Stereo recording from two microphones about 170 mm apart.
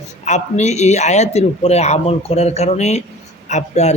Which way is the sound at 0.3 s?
45° left (ahead or behind).